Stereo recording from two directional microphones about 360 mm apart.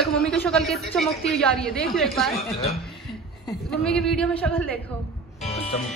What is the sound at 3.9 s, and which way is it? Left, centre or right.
Speech, centre.